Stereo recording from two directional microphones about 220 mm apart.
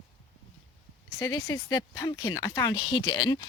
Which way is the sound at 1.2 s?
15° left (ahead or behind).